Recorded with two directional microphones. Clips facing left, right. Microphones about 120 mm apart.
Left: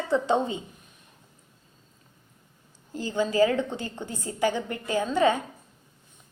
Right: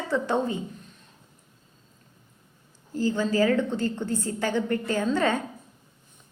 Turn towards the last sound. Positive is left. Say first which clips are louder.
# left 1 dB
turn(degrees=15)  # may be behind; listen again after turning